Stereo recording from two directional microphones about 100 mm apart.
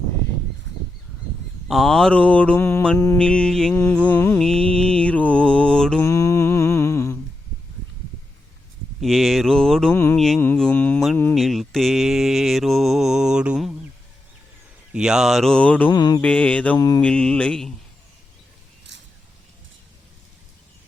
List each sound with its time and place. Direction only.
1.6 s mantra: centre (ahead or behind); by 4.4 s 20° left (ahead or behind)
4.4 s mantra: 5° left (ahead or behind)
6.1 s mantra: 30° left (ahead or behind)
9.0 s mantra: centre (ahead or behind)
9.9 s mantra: 25° left (ahead or behind)
10.2 s mantra: 5° left (ahead or behind)
10.6 s mantra: 15° left (ahead or behind)
11.3 s mantra: centre (ahead or behind)
14.9 s mantra: 5° right (ahead or behind); by 15.9 s 15° left (ahead or behind)
15.9 s mantra: 45° left (ahead or behind)
16.2 s mantra: 10° left (ahead or behind)